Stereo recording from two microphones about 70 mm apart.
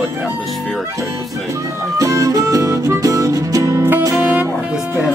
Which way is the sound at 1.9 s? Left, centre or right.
Right.